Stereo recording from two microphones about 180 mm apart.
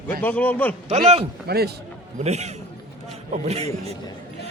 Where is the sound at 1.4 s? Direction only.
60° right (ahead or behind).